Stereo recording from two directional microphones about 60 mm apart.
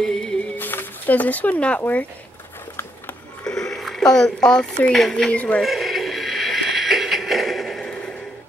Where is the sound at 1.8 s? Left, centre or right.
Left.